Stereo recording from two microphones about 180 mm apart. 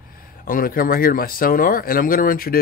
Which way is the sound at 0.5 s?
50° left (ahead or behind).